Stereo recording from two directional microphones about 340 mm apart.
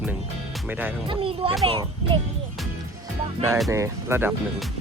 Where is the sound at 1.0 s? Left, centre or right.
Centre.